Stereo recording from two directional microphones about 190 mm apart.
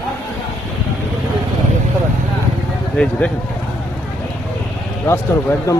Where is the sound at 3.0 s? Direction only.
5° left (ahead or behind).